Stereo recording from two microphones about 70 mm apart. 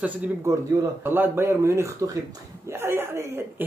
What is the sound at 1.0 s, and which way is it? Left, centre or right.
A woman's voice, right.